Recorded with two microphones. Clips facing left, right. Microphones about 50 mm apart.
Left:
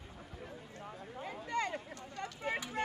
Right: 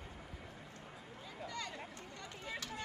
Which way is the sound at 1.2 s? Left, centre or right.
Left.